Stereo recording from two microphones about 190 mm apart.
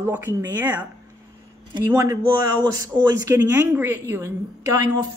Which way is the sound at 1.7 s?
20° right (ahead or behind).